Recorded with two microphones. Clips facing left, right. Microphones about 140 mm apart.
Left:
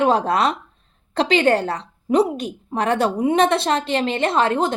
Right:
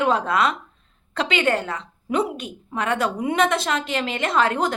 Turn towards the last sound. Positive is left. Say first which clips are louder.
# left 2 dB
turn(degrees=25)  # may be behind; listen again after turning